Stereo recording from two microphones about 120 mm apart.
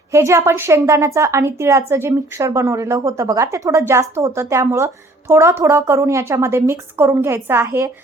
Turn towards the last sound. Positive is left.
turn(degrees=-25)  # may be behind; listen again after turning